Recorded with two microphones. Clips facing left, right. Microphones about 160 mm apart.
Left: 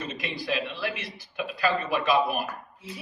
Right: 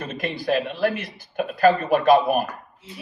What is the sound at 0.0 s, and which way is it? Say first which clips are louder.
A man's voice: right 6 dB; 50° right (ahead or behind).